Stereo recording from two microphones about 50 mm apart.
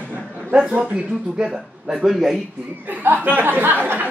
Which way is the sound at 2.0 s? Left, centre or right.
Centre.